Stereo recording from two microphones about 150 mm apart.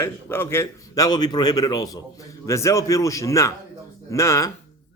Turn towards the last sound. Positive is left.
turn(degrees=20)  # may be behind; listen again after turning